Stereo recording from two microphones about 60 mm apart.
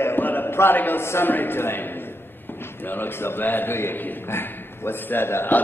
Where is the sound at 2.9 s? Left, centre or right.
Left.